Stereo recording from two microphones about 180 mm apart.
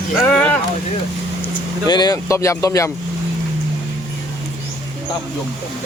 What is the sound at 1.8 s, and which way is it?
Speech, 25° left (ahead or behind).